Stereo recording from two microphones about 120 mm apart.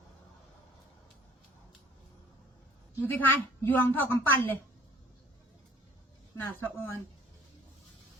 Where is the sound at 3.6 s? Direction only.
20° left (ahead or behind).